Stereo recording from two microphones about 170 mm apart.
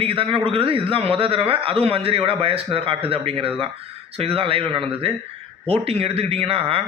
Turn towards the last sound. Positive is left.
turn(degrees=-35)  # may be behind; listen again after turning